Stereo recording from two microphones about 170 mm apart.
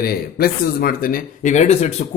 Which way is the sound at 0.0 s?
65° left (ahead or behind).